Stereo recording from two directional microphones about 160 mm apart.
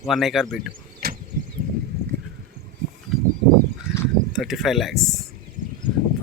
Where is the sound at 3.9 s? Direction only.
15° left (ahead or behind).